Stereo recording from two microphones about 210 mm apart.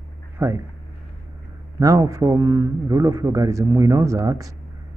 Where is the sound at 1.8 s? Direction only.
15° right (ahead or behind).